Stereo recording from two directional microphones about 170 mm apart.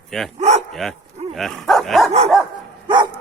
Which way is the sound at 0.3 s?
40° right (ahead or behind).